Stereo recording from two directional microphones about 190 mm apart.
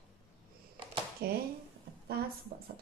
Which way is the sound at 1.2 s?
55° right (ahead or behind).